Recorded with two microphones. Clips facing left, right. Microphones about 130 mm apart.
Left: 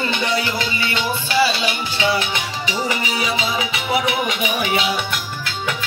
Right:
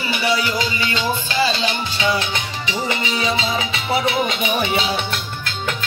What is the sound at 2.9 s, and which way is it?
Music, 25° right (ahead or behind).